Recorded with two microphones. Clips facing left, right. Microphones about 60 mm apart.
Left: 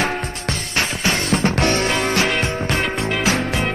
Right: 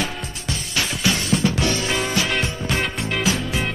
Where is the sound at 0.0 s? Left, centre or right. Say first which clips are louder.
Left 6 dB; left.